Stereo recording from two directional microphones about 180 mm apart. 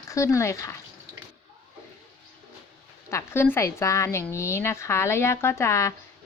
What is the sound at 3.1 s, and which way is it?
A woman's voice, 15° left (ahead or behind).